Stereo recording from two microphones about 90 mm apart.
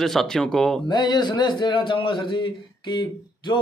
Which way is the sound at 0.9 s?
55° left (ahead or behind).